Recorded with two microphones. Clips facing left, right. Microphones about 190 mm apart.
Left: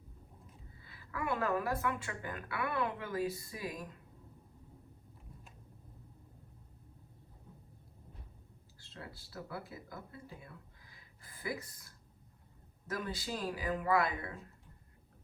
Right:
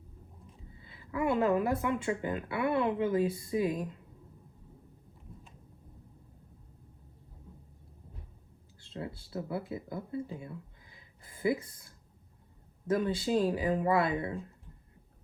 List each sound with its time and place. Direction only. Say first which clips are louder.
0.8 s a woman's voice: right 8 dB; 25° right (ahead or behind)
8.8 s a woman's voice: right 10 dB; 25° right (ahead or behind)